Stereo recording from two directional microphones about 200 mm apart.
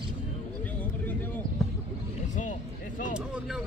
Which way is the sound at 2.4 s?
40° left (ahead or behind).